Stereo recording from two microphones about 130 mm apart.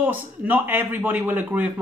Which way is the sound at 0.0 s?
15° right (ahead or behind).